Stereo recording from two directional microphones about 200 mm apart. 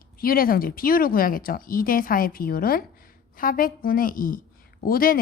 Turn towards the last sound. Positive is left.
turn(degrees=45)  # may be behind; listen again after turning